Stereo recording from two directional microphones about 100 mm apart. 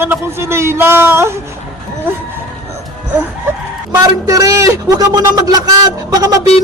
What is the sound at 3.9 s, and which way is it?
A man's voice, 35° right (ahead or behind).